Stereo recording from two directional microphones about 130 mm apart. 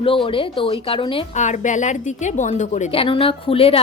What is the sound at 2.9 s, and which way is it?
Speech, 45° left (ahead or behind).